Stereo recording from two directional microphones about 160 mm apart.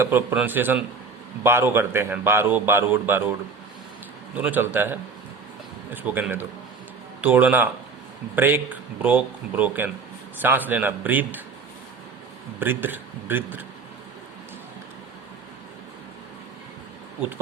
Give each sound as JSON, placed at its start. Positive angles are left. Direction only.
{"t": 0.0, "sound": "a man's voice", "side_deg": -15}
{"t": 4.4, "sound": "a man's voice", "side_deg": -10}
{"t": 12.5, "sound": "a man's voice", "side_deg": -10}